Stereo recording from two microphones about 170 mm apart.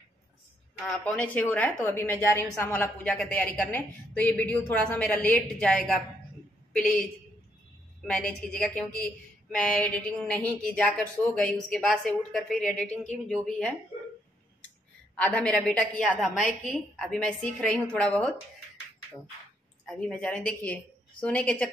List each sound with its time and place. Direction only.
0.7 s a woman's voice: 5° left (ahead or behind)
8.1 s speech: 5° left (ahead or behind)
12.9 s speech: 40° left (ahead or behind)
13.3 s speech: 5° left (ahead or behind)
15.1 s speech: 10° left (ahead or behind)
19.9 s a woman's voice: 5° left (ahead or behind)